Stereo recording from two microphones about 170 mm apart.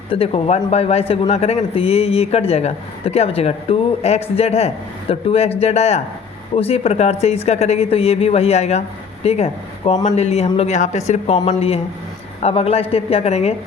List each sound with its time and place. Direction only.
0.1 s speech: 35° left (ahead or behind)